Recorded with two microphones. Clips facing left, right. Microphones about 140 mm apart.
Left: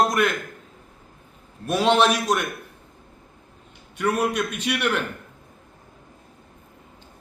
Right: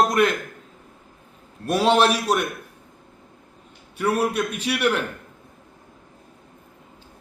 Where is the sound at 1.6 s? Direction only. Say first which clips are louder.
Right 1 dB; 10° right (ahead or behind).